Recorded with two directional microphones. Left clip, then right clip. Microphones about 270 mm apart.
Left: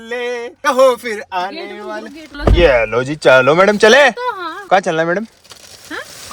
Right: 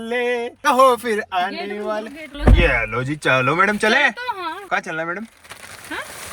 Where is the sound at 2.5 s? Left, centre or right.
Left.